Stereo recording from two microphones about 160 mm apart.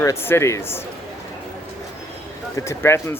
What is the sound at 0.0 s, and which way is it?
Speech, 15° left (ahead or behind).